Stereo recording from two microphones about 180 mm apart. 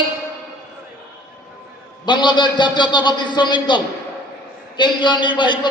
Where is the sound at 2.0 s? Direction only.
25° left (ahead or behind).